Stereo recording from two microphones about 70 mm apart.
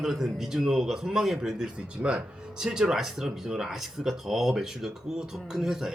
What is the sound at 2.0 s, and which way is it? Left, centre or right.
Speech, right.